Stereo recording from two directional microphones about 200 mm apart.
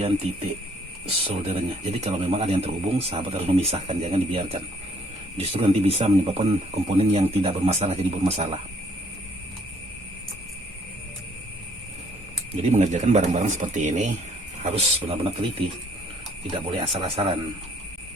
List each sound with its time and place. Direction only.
1.0 s speech: 30° right (ahead or behind)
12.6 s speech: 35° right (ahead or behind)
16.7 s speech: 30° right (ahead or behind)